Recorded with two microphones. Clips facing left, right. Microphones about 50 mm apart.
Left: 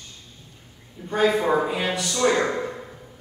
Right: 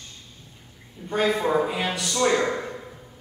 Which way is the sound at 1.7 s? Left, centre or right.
Centre.